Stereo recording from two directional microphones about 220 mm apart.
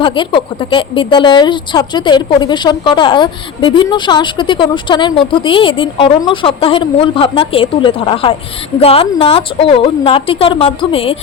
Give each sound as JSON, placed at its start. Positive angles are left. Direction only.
{"t": 0.0, "sound": "a woman's voice", "side_deg": 20}